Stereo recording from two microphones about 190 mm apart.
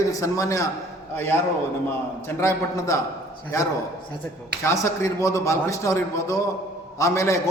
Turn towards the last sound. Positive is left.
turn(degrees=15)  # may be behind; listen again after turning